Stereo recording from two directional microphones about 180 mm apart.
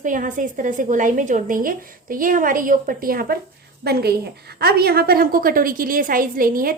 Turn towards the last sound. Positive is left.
turn(degrees=-50)  # may be behind; listen again after turning